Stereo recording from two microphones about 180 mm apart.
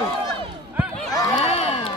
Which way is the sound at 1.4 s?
35° left (ahead or behind).